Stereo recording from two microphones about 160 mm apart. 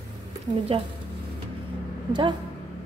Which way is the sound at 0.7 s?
35° right (ahead or behind).